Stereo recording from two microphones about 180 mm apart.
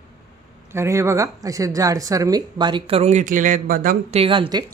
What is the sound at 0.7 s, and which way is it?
Speech, 15° right (ahead or behind).